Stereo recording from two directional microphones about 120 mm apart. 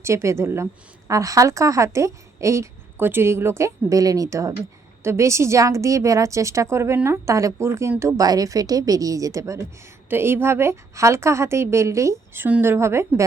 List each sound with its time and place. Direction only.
0.0 s a woman's voice: 25° right (ahead or behind)